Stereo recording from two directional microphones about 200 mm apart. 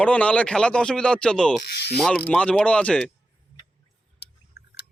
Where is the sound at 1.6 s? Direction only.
55° left (ahead or behind).